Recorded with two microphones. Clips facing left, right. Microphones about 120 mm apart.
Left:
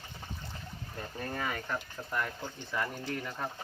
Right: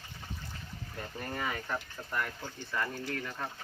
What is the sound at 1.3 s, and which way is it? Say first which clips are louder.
Speech: even; centre (ahead or behind).